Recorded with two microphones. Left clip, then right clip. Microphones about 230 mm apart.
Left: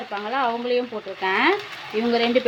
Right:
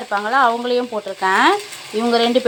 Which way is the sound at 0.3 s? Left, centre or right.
Centre.